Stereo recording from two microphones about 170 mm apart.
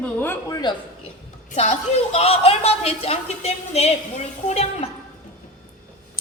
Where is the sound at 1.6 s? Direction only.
40° left (ahead or behind).